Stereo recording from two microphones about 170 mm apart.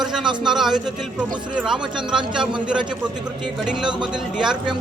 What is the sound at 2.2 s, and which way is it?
Speech, 25° right (ahead or behind).